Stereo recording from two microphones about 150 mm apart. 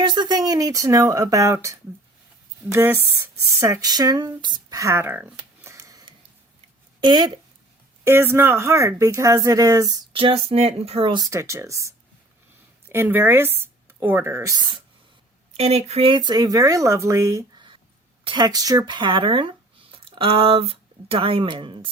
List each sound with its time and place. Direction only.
0.0 s speech: 30° right (ahead or behind)
8.0 s speech: 15° right (ahead or behind)
10.2 s speech: 40° right (ahead or behind)
11.3 s speech: 20° right (ahead or behind)
15.5 s speech: 45° right (ahead or behind)